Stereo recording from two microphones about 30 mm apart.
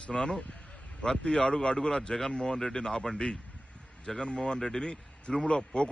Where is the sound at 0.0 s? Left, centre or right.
Left.